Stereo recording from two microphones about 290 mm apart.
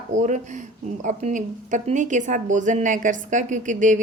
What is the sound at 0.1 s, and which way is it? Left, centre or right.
A woman's voice, right.